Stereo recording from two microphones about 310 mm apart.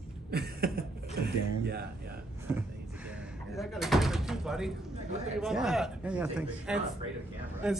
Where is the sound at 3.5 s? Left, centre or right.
Centre.